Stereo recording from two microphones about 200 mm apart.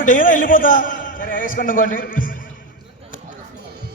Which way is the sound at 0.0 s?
40° left (ahead or behind).